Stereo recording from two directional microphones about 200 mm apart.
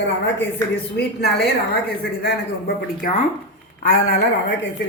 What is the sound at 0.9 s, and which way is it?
Speech, 55° left (ahead or behind).